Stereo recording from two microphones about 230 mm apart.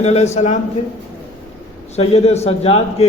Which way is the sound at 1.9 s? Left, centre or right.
Left.